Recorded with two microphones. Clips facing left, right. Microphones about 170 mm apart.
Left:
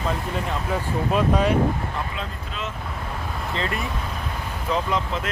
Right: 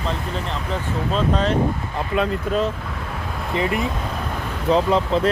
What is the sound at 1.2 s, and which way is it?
Speech, 10° left (ahead or behind).